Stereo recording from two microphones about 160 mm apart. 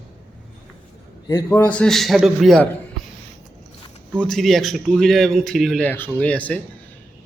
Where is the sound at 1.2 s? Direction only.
25° left (ahead or behind).